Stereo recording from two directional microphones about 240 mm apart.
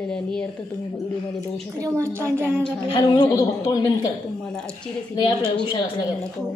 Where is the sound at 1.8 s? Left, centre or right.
Centre.